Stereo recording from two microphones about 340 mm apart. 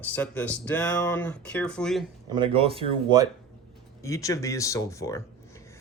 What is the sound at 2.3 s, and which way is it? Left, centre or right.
Speech, centre.